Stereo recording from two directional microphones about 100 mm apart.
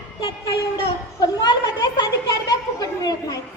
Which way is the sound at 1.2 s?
40° left (ahead or behind).